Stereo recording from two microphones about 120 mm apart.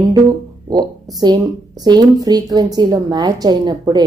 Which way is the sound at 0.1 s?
30° right (ahead or behind).